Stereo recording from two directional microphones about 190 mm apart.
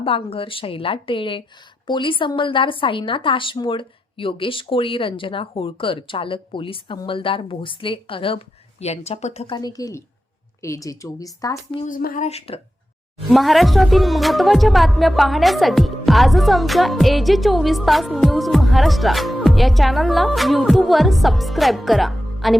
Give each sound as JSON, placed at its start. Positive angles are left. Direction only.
{"t": 0.0, "sound": "speech", "side_deg": 30}
{"t": 9.6, "sound": "a woman's voice", "side_deg": 20}
{"t": 11.9, "sound": "speech", "side_deg": 45}
{"t": 13.3, "sound": "speech", "side_deg": 0}